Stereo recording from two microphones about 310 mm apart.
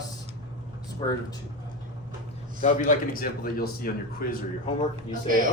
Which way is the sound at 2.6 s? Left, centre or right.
Left.